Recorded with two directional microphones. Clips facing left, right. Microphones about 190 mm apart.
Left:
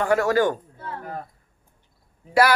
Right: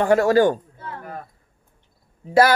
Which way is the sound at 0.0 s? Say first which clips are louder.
Right 4 dB; 30° right (ahead or behind).